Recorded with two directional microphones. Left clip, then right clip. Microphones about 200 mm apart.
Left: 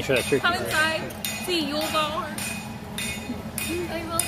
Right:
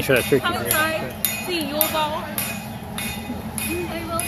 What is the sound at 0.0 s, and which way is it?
Speech, 25° right (ahead or behind).